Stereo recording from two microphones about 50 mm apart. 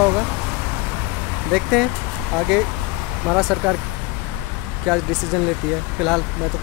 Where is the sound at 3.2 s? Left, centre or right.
Centre.